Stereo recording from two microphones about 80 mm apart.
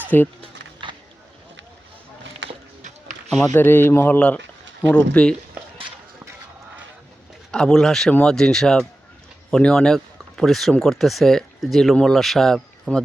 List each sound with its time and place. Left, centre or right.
0.1 s speech: left
0.8 s a sound: right
3.5 s speech: left
7.5 s speech: centre